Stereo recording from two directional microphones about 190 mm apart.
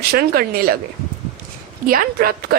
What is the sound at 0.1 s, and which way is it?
Speech, 50° right (ahead or behind).